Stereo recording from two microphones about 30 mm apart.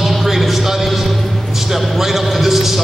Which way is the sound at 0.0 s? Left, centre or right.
Centre.